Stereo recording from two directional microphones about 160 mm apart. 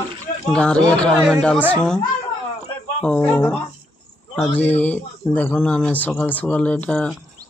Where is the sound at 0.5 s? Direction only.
5° left (ahead or behind).